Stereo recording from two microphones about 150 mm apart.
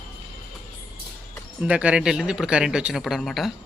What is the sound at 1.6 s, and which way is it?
Speech, 10° right (ahead or behind).